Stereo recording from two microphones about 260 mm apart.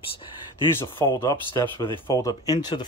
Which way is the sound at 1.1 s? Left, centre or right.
Centre.